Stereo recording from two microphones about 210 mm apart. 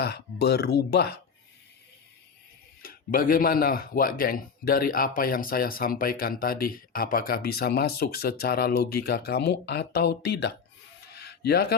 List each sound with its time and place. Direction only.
0.0 s speech: 50° left (ahead or behind)
2.8 s speech: 45° left (ahead or behind)
11.1 s a sound: 50° left (ahead or behind)